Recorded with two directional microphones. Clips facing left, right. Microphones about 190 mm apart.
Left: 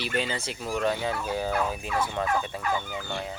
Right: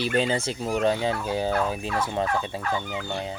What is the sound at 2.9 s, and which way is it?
Fowl, 20° right (ahead or behind).